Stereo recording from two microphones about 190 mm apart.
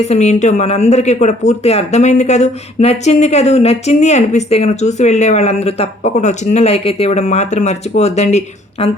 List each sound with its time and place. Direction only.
0.0 s speech: 35° left (ahead or behind)